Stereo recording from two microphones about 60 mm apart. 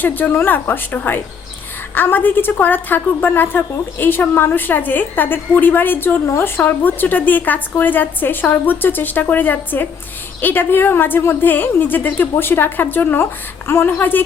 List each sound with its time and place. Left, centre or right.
0.0 s a woman's voice: left
6.2 s a woman's voice: left